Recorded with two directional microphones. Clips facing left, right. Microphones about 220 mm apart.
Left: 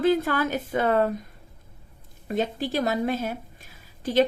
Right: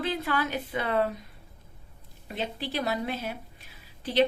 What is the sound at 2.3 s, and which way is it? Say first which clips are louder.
Speech: left 7 dB; 45° left (ahead or behind).